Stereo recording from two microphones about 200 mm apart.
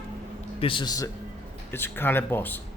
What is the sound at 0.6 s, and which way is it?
A man's voice, 25° left (ahead or behind).